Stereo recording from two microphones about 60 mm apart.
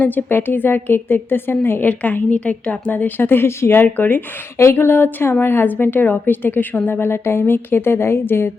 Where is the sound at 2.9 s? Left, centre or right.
Left.